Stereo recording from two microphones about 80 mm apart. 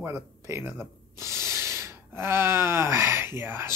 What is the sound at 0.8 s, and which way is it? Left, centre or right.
Gasp, right.